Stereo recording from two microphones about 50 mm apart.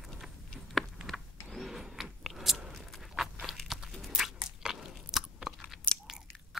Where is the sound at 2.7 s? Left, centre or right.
Centre.